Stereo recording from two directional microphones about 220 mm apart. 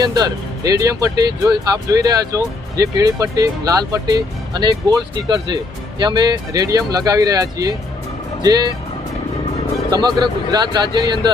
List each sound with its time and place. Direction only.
0.0 s speech: 15° right (ahead or behind)
9.9 s a man's voice: 20° right (ahead or behind)